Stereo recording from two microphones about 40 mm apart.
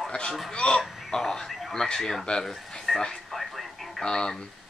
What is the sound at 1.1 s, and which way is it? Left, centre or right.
Speech, centre.